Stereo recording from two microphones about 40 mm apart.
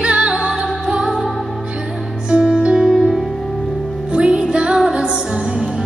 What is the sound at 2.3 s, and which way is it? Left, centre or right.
Music, right.